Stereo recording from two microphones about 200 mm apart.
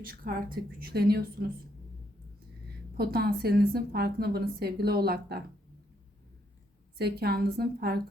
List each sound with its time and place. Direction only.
0.0 s a woman's voice: 45° right (ahead or behind)
3.0 s a woman's voice: 50° right (ahead or behind)
7.0 s a woman's voice: 50° right (ahead or behind)